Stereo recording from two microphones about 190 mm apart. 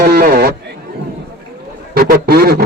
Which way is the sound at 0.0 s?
55° right (ahead or behind).